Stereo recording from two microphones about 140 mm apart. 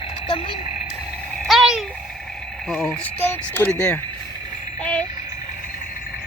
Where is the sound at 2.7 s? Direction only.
10° left (ahead or behind).